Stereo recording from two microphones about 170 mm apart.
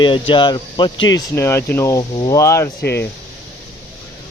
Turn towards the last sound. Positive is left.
turn(degrees=75)  # may be behind; listen again after turning